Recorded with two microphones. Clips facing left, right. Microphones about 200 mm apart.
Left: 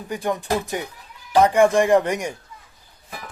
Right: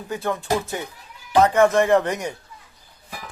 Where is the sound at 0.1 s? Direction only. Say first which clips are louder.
Even; 15° left (ahead or behind).